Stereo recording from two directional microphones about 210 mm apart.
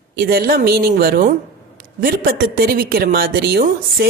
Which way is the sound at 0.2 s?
45° right (ahead or behind).